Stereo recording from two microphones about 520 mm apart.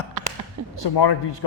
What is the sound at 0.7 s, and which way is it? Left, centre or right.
Speech, left.